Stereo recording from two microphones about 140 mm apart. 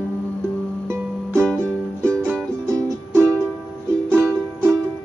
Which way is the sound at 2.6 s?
20° right (ahead or behind).